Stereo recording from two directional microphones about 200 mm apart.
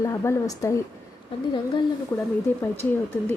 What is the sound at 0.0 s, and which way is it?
Speech, 15° left (ahead or behind).